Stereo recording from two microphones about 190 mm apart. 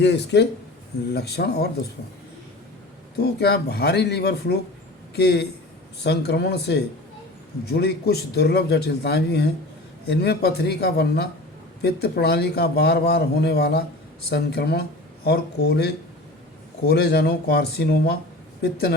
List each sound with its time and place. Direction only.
0.0 s a man's voice: 65° left (ahead or behind)
3.2 s a man's voice: 60° left (ahead or behind)